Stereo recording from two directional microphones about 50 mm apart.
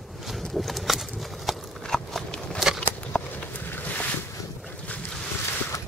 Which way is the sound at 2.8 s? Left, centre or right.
Left.